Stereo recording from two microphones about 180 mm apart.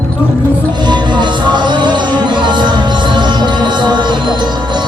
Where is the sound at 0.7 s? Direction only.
25° right (ahead or behind).